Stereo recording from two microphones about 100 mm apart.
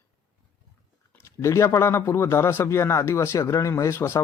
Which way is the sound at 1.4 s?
30° left (ahead or behind).